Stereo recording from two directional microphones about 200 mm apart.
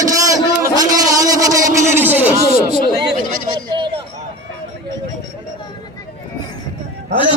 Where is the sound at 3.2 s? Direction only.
40° right (ahead or behind).